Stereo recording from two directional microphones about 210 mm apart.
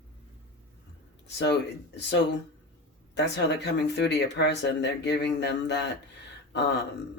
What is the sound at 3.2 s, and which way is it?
Speech, 55° left (ahead or behind).